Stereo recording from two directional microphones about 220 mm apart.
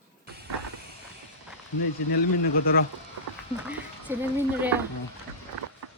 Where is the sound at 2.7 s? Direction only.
40° left (ahead or behind).